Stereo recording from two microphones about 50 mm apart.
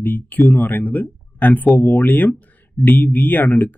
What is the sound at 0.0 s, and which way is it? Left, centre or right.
Speech, left.